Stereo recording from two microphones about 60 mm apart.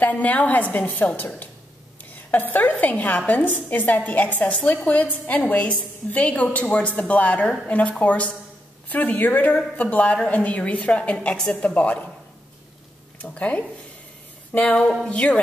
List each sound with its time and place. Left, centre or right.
0.0 s a woman's voice: left
13.3 s a woman's voice: left
14.6 s speech: centre
15.0 s a woman's voice: left